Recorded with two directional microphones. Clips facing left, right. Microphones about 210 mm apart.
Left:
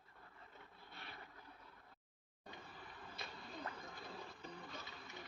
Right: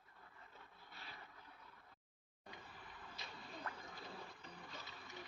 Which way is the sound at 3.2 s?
55° left (ahead or behind).